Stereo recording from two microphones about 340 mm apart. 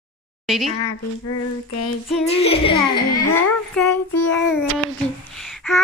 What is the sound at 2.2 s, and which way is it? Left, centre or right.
Child singing, centre.